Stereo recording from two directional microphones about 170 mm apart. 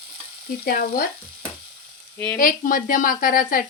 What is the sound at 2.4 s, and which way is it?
Speech, 55° left (ahead or behind).